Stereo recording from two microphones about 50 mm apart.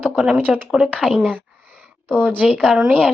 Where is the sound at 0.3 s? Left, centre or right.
Right.